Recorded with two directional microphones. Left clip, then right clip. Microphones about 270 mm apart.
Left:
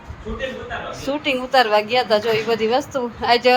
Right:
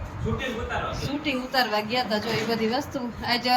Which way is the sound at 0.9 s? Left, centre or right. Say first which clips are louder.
Left 7 dB; centre.